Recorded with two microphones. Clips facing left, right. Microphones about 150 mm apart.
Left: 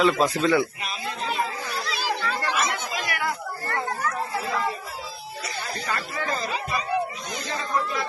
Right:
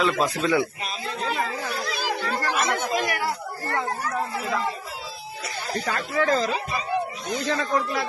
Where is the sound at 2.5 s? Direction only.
50° right (ahead or behind); by 4.1 s 35° right (ahead or behind).